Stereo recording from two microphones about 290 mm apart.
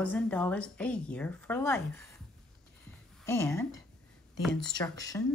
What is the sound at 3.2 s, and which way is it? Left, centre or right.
Speech, centre.